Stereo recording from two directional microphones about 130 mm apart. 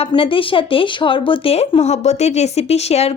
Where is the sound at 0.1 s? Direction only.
40° left (ahead or behind).